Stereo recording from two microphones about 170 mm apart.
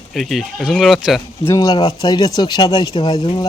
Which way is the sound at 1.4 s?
20° left (ahead or behind).